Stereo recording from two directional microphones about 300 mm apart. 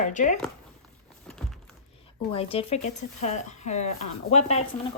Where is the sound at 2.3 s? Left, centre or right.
Centre.